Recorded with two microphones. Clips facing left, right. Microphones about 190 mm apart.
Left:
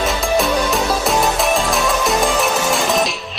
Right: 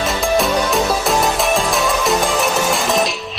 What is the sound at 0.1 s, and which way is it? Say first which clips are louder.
Music: right 3 dB; centre (ahead or behind).